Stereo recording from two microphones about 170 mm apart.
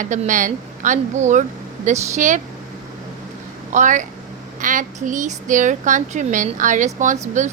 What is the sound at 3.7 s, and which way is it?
A woman's voice, 45° right (ahead or behind).